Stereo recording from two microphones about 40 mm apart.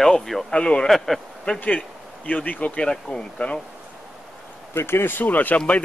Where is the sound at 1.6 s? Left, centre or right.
Left.